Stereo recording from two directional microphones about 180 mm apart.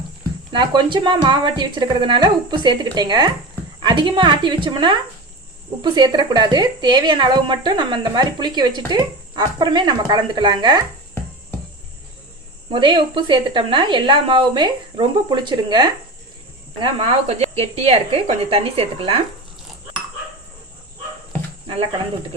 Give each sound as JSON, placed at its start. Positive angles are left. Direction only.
{"t": 0.5, "sound": "speech", "side_deg": -25}
{"t": 12.7, "sound": "speech", "side_deg": -25}